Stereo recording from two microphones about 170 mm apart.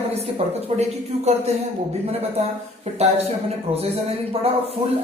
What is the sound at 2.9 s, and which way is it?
Speech, 40° right (ahead or behind).